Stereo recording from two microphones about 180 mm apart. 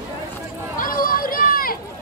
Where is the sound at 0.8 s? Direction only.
50° left (ahead or behind).